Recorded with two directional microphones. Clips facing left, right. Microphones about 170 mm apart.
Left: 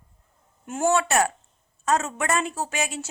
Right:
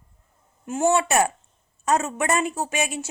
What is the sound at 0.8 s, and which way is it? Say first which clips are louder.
A woman's voice: right 1 dB; 15° right (ahead or behind).